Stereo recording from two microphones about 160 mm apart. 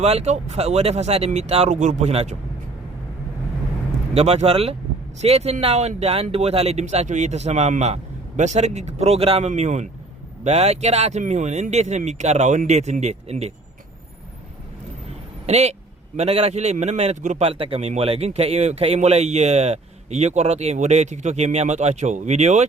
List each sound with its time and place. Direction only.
0.0 s speech: 40° right (ahead or behind)
4.1 s a man's voice: 40° right (ahead or behind)
15.4 s a man's voice: 45° right (ahead or behind)